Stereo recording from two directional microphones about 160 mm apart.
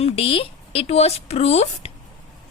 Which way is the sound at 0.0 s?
35° left (ahead or behind).